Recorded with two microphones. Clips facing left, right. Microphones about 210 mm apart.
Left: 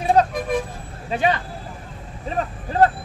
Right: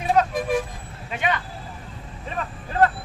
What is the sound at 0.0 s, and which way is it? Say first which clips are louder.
Vehicle: left 3 dB; 35° left (ahead or behind).